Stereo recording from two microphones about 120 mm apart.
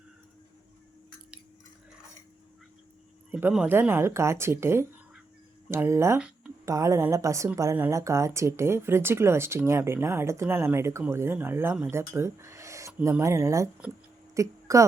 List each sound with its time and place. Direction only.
3.7 s a woman's voice: 20° right (ahead or behind)
6.1 s a sound: 10° right (ahead or behind)
6.7 s a woman's voice: 25° right (ahead or behind)